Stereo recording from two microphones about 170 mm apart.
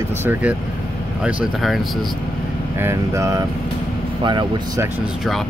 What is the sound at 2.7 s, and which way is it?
Speech, 15° right (ahead or behind).